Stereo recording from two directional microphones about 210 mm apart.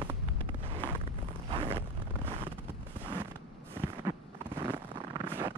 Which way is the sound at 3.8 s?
10° right (ahead or behind).